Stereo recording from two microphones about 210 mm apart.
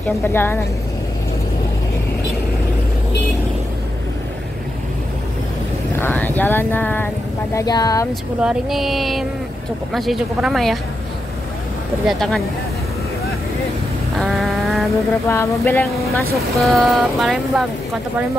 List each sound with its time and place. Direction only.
0.0 s speech: 10° left (ahead or behind)
5.9 s speech: 10° left (ahead or behind)
8.4 s speech: 5° right (ahead or behind)
12.1 s speech: centre (ahead or behind)
14.1 s vehicle: centre (ahead or behind)
15.2 s speech: 10° left (ahead or behind)